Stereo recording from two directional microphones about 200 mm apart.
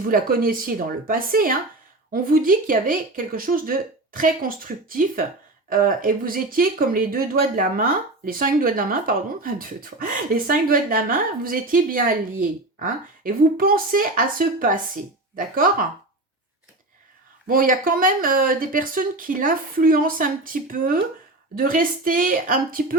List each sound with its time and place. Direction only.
0.1 s speech: 45° right (ahead or behind)
17.4 s speech: 45° right (ahead or behind)